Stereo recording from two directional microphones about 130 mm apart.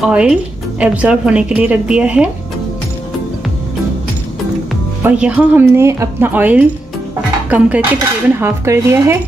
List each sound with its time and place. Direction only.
0.0 s speech: 5° right (ahead or behind)
5.0 s speech: 10° right (ahead or behind)
7.4 s dishes: 10° right (ahead or behind)